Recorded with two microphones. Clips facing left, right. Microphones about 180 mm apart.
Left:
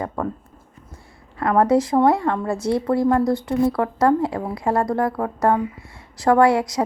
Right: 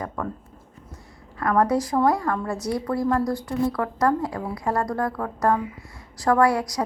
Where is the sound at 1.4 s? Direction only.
25° left (ahead or behind).